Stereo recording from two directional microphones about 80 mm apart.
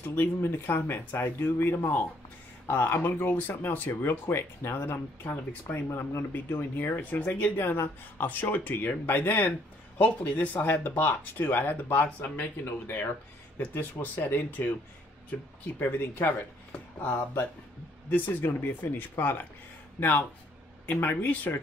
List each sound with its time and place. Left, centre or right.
0.0 s speech: left
7.5 s speech: left
18.1 s speech: left